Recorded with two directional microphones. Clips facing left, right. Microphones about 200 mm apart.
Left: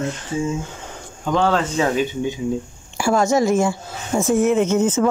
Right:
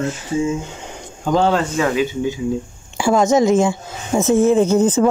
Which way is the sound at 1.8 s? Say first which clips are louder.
Even; 20° left (ahead or behind).